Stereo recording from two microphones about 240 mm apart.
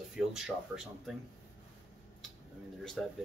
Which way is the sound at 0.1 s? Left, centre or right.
Centre.